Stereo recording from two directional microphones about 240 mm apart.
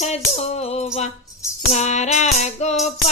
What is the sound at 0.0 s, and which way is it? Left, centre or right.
Music, left.